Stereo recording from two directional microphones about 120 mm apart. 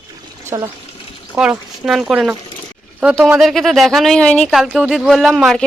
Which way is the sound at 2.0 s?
10° right (ahead or behind).